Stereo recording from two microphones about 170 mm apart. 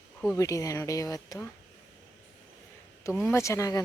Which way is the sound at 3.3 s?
15° left (ahead or behind).